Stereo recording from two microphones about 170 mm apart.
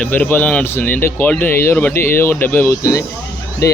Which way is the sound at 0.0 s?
10° left (ahead or behind).